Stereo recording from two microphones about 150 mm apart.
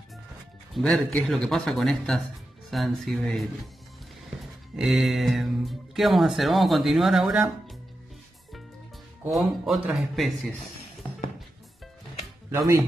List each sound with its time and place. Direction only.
0.7 s speech: 5° left (ahead or behind)
9.3 s speech: centre (ahead or behind)
12.4 s speech: 20° right (ahead or behind)